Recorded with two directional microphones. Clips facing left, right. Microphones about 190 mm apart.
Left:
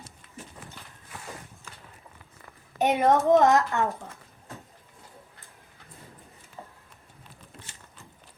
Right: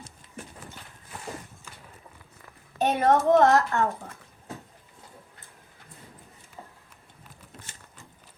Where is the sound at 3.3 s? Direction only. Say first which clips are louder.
Right 1 dB; 15° left (ahead or behind).